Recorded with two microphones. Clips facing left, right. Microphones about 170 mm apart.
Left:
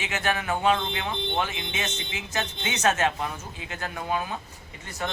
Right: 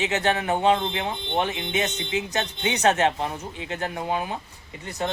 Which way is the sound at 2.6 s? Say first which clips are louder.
Right 4 dB; 35° right (ahead or behind).